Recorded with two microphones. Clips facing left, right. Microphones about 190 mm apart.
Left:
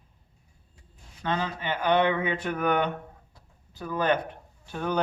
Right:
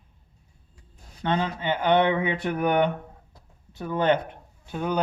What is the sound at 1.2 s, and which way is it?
Speech, 20° right (ahead or behind).